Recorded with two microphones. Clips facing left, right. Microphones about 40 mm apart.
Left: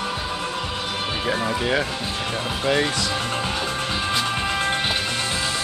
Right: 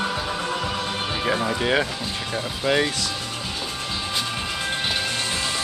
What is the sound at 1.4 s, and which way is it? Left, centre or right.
Speech, centre.